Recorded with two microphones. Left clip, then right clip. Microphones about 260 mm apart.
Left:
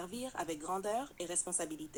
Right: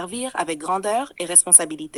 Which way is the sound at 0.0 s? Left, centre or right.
Right.